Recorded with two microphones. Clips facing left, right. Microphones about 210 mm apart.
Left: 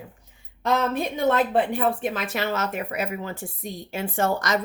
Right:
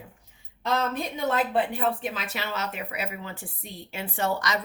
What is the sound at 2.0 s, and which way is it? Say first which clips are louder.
A woman's voice: left 6 dB; 50° left (ahead or behind).